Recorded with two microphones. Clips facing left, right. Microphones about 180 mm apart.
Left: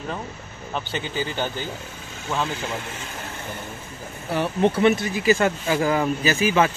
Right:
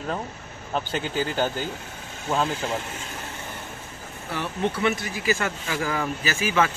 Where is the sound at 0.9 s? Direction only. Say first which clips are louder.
Right 1 dB; 10° right (ahead or behind).